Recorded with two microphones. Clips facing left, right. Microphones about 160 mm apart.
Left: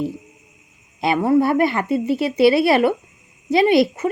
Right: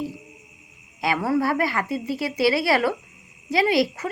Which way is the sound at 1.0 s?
20° left (ahead or behind).